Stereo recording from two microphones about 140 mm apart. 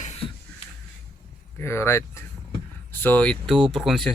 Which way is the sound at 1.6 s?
20° left (ahead or behind).